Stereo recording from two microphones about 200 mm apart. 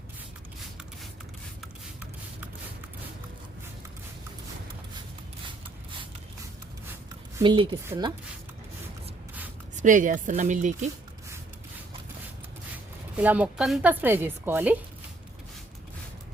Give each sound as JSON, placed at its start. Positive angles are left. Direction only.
{"t": 1.6, "sound": "a sound", "side_deg": -10}
{"t": 7.3, "sound": "speech", "side_deg": -25}
{"t": 9.8, "sound": "speech", "side_deg": -40}
{"t": 13.1, "sound": "speech", "side_deg": -5}